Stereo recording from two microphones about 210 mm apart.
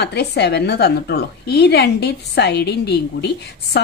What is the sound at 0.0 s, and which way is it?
Speech, 50° left (ahead or behind).